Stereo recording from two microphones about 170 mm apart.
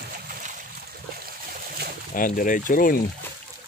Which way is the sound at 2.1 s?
55° left (ahead or behind).